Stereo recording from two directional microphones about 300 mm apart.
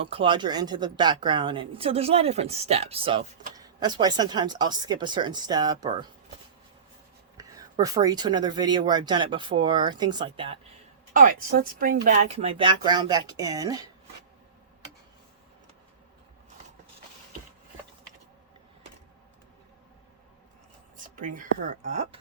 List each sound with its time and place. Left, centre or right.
0.0 s speech: centre
7.3 s speech: centre
11.1 s speech: right; by 13.8 s centre
21.2 s speech: right